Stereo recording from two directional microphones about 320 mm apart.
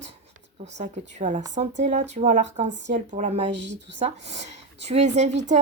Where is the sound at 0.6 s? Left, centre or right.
Right.